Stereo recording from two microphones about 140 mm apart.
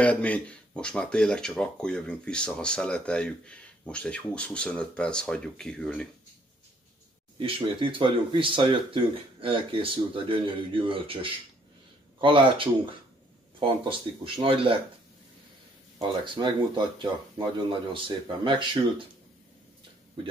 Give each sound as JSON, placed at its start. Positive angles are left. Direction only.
{"t": 0.0, "sound": "speech", "side_deg": 10}
{"t": 7.3, "sound": "speech", "side_deg": -40}
{"t": 12.2, "sound": "speech", "side_deg": -35}
{"t": 16.3, "sound": "speech", "side_deg": -30}